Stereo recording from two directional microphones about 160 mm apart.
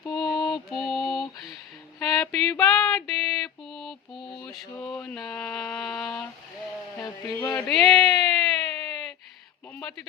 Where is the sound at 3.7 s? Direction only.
Centre (ahead or behind).